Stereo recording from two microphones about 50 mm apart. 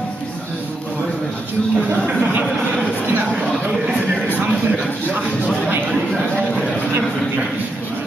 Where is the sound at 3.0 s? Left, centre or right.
Right.